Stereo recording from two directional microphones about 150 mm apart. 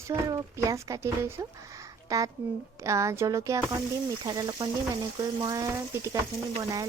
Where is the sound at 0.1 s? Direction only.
25° right (ahead or behind).